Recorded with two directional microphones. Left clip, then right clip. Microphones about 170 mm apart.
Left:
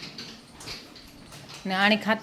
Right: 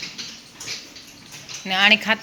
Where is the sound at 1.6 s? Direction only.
20° left (ahead or behind).